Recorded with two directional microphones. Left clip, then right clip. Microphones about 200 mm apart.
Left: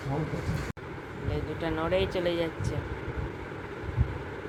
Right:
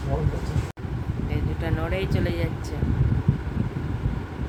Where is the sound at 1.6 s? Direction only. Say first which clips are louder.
Left 2 dB; 5° right (ahead or behind).